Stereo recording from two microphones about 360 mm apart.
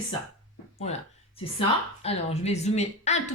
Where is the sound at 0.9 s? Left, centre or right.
Centre.